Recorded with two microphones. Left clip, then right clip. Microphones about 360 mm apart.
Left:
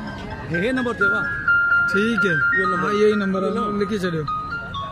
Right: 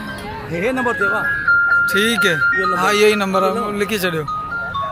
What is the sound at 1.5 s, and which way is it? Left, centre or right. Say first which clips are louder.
Music: right 3 dB; centre.